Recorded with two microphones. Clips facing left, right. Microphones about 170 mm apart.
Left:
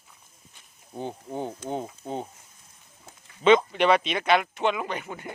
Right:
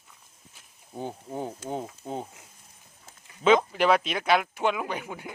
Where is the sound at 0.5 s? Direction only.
5° right (ahead or behind).